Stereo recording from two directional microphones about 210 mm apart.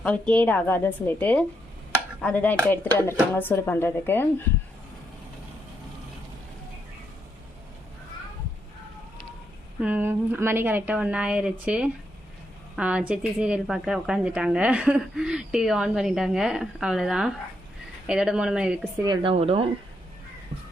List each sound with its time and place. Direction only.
0.0 s speech: 5° left (ahead or behind)
9.8 s a woman's voice: 10° right (ahead or behind)
19.0 s speech: 20° right (ahead or behind)